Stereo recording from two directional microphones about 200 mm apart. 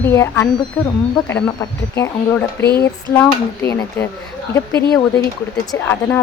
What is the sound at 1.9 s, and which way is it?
Speech, 15° left (ahead or behind).